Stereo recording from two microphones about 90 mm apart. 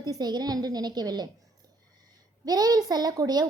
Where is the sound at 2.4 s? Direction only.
45° right (ahead or behind).